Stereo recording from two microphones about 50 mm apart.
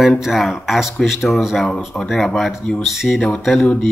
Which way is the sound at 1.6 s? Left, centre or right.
Centre.